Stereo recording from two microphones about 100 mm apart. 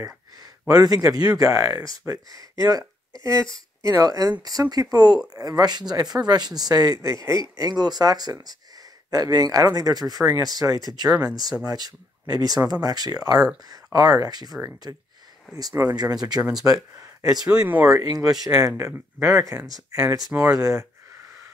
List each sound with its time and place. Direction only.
0.0 s speech: 40° right (ahead or behind)
3.8 s speech: 35° right (ahead or behind)
15.8 s speech: 40° right (ahead or behind)
17.0 s a sound: 35° right (ahead or behind)
17.5 s speech: 15° right (ahead or behind)
17.8 s speech: 35° right (ahead or behind)
18.7 s speech: 20° right (ahead or behind)